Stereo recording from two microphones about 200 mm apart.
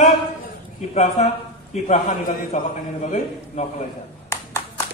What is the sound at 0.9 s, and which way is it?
A man's voice, 35° left (ahead or behind).